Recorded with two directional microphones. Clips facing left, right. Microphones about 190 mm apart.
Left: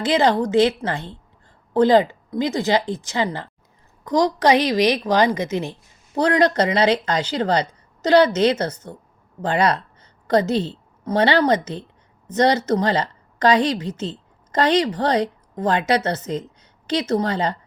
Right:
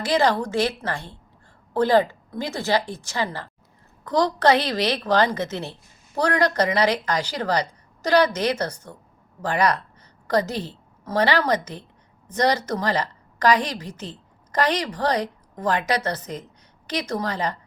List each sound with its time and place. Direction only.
0.0 s a woman's voice: 20° left (ahead or behind)